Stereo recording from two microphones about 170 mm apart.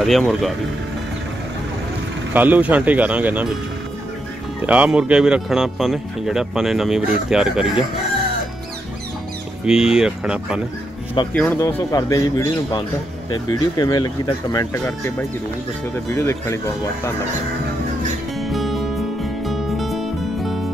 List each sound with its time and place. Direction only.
0.0 s speech: centre (ahead or behind)
2.3 s speech: 10° right (ahead or behind)
4.6 s speech: 5° right (ahead or behind)
9.7 s speech: 5° right (ahead or behind)
11.2 s speech: 30° left (ahead or behind)
16.1 s speech: 15° left (ahead or behind)
18.4 s music: centre (ahead or behind)